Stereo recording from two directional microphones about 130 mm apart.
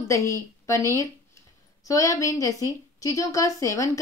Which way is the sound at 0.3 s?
25° left (ahead or behind).